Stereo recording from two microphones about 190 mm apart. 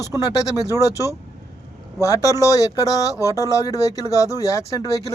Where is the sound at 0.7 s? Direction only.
15° left (ahead or behind).